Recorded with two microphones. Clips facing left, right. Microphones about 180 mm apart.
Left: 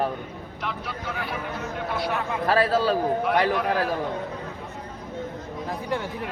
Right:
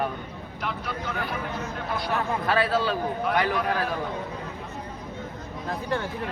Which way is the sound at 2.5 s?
40° left (ahead or behind).